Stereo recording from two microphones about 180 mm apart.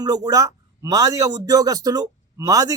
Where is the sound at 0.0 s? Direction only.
20° right (ahead or behind).